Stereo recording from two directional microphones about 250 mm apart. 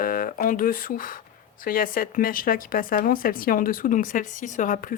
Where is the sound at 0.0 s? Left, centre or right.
Left.